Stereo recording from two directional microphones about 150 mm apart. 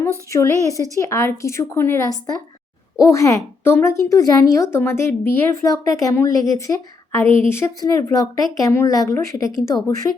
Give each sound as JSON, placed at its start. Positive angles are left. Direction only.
{"t": 0.0, "sound": "speech", "side_deg": 20}